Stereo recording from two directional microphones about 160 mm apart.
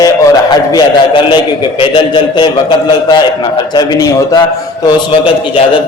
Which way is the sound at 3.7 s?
25° left (ahead or behind).